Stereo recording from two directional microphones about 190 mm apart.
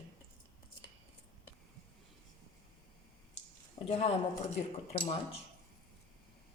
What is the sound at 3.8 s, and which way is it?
Speech, 30° left (ahead or behind).